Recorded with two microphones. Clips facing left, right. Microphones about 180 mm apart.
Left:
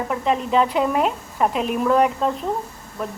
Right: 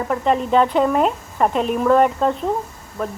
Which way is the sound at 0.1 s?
Centre (ahead or behind).